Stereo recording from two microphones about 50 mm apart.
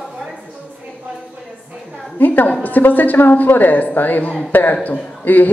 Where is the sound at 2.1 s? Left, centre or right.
Left.